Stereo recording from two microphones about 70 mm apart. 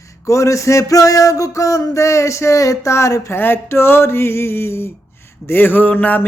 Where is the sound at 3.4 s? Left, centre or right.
Left.